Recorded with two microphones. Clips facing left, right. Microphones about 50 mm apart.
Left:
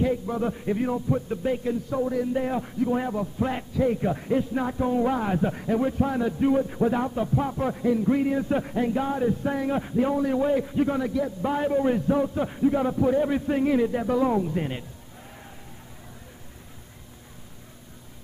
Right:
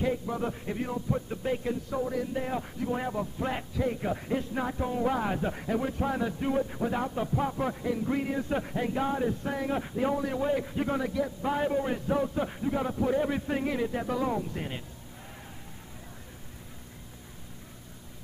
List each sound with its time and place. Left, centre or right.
0.0 s a man's voice: centre